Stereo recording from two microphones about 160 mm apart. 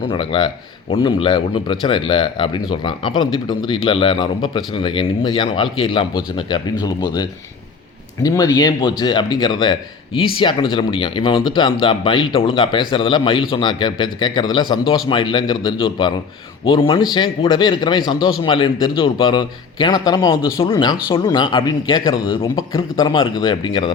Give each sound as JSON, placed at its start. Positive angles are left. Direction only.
{"t": 0.1, "sound": "a man's voice", "side_deg": 35}